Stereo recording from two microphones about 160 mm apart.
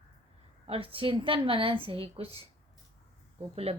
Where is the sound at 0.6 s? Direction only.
35° right (ahead or behind).